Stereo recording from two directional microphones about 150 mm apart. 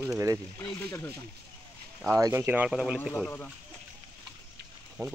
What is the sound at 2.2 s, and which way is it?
Speech, 20° right (ahead or behind).